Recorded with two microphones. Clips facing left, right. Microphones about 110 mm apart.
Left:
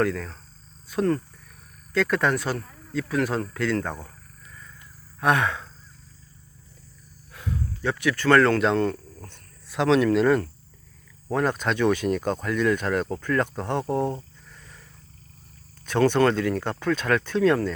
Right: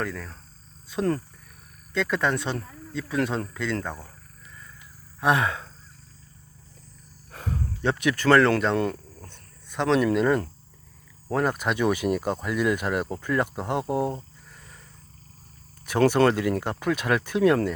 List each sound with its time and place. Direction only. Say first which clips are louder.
0.0 s speech: left 7 dB; 5° right (ahead or behind)
1.9 s speech: left 2 dB; centre (ahead or behind)
5.2 s speech: even; 5° right (ahead or behind)
7.3 s a sound: even; 40° right (ahead or behind)
7.8 s speech: right 1 dB; 20° right (ahead or behind)
8.3 s speech: left 1 dB; 5° right (ahead or behind)
9.6 s speech: left 2 dB; 5° left (ahead or behind)
15.9 s speech: even; 10° right (ahead or behind)